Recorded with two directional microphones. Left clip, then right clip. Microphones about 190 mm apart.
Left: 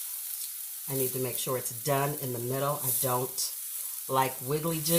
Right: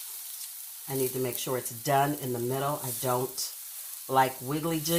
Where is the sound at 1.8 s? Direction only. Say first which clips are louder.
Right 5 dB; 30° right (ahead or behind).